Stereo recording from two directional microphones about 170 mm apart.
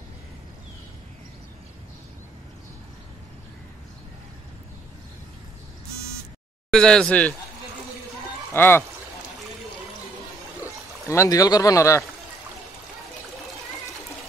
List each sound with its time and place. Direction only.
6.7 s speech: 5° left (ahead or behind)
8.5 s speech: 10° left (ahead or behind)
11.1 s speech: 20° left (ahead or behind)